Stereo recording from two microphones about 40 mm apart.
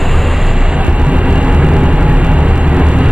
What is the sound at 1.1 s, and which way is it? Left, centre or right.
Vehicle, centre.